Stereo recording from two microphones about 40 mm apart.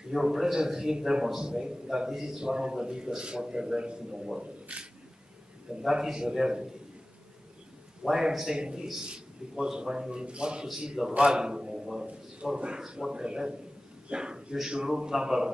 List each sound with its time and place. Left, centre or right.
0.1 s a man's voice: centre; by 4.8 s right
5.8 s a man's voice: centre
8.1 s a man's voice: centre
11.8 s a sound: centre
12.5 s a man's voice: right